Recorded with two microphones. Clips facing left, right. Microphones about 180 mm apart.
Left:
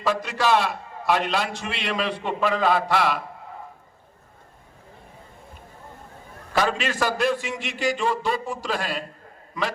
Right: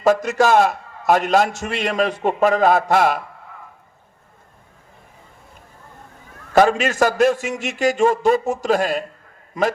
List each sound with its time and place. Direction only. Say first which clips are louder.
0.0 s a man's voice: right 8 dB; 45° right (ahead or behind)
6.5 s a man's voice: right 8 dB; 45° right (ahead or behind)